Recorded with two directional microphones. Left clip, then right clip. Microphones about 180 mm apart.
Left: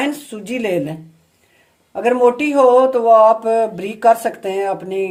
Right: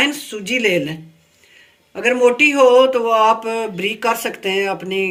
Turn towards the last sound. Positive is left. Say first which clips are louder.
# even
turn(degrees=45)  # may be behind; listen again after turning